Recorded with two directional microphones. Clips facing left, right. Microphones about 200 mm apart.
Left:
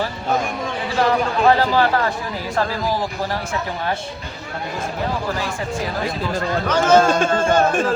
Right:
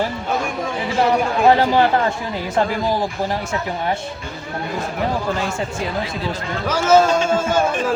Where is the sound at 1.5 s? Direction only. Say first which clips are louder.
Right 2 dB; 20° right (ahead or behind).